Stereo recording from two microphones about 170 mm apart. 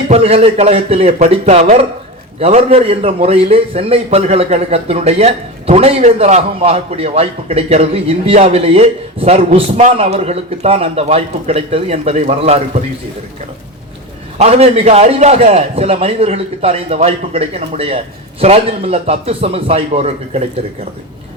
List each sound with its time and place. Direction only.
0.1 s a man's voice: 35° right (ahead or behind)
14.3 s a man's voice: 40° right (ahead or behind)